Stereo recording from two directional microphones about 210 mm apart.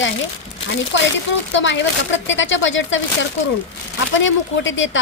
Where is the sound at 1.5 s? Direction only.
60° left (ahead or behind).